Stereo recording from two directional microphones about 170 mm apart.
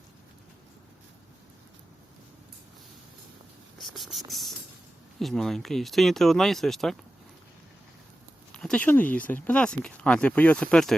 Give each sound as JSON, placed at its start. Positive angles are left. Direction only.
{"t": 3.8, "sound": "insect", "side_deg": 0}
{"t": 4.3, "sound": "speech", "side_deg": 0}
{"t": 8.5, "sound": "speech", "side_deg": 5}